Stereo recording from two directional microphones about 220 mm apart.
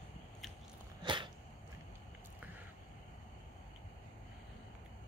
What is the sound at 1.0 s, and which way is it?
Cat, 20° right (ahead or behind).